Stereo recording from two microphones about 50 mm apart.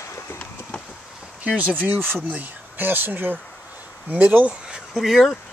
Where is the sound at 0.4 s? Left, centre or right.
Left.